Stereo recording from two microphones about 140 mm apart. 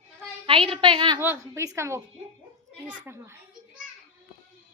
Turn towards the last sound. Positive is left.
turn(degrees=-15)  # may be behind; listen again after turning